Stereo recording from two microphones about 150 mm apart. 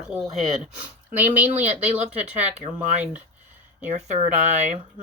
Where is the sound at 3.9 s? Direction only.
50° right (ahead or behind).